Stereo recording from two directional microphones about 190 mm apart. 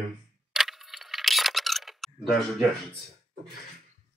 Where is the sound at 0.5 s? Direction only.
Centre (ahead or behind).